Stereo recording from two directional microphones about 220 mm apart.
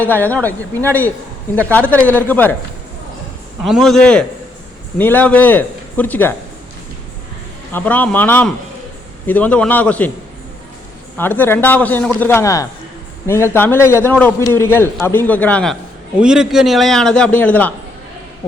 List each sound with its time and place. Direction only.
0.0 s a man's voice: 5° left (ahead or behind)
3.6 s a man's voice: centre (ahead or behind)
7.7 s a man's voice: 10° left (ahead or behind)
11.2 s a man's voice: 10° left (ahead or behind)